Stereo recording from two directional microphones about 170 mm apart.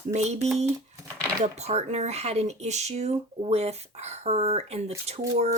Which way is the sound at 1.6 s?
40° right (ahead or behind).